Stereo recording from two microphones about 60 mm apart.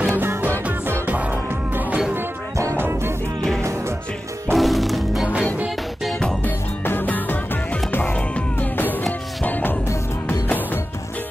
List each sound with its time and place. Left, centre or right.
0.1 s music: right
2.5 s music: right
4.5 s music: centre
6.4 s music: left
8.5 s music: left